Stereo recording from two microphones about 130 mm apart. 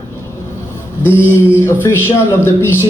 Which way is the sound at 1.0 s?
15° left (ahead or behind).